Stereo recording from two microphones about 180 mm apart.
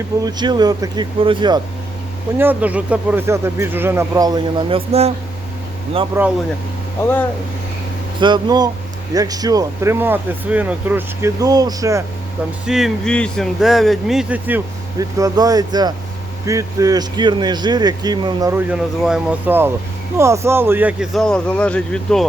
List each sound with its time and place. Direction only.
0.2 s speech: 25° right (ahead or behind)
2.4 s speech: 10° right (ahead or behind); by 5.1 s 35° right (ahead or behind)
6.2 s speech: 15° right (ahead or behind)
8.2 s speech: 25° right (ahead or behind)
12.6 s speech: centre (ahead or behind); by 18.6 s 20° right (ahead or behind)
18.7 s speech: 5° right (ahead or behind)